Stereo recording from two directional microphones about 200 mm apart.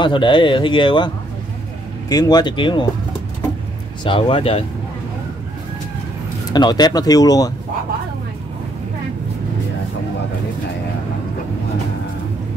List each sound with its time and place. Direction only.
0.0 s speech: 25° left (ahead or behind)
4.0 s speech: 25° left (ahead or behind)
6.5 s speech: 20° left (ahead or behind)